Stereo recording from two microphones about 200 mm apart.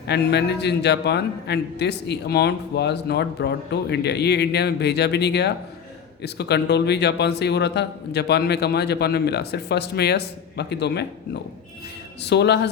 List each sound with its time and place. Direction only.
0.1 s a man's voice: 55° left (ahead or behind)
12.2 s a man's voice: 55° left (ahead or behind)